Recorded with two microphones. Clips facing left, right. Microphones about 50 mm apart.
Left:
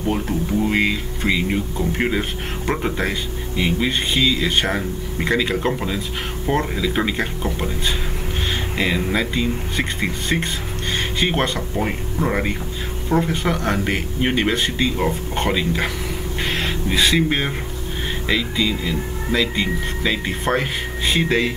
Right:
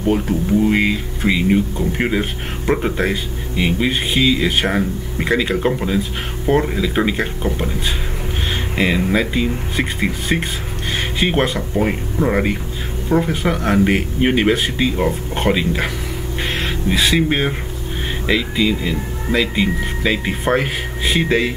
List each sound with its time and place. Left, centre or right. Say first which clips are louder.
0.0 s speech: right 4 dB; centre